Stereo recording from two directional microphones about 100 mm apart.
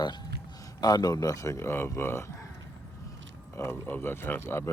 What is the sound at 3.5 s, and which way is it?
A man's voice, 25° left (ahead or behind).